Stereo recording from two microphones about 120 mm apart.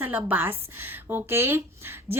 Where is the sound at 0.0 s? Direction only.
15° right (ahead or behind).